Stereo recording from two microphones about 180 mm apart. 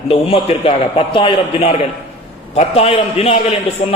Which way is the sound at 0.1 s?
30° left (ahead or behind).